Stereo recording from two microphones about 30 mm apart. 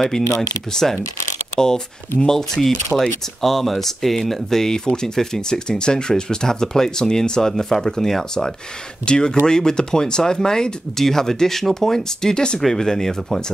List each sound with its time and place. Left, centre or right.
1.6 s speech: left
7.4 s speech: centre
9.0 s speech: left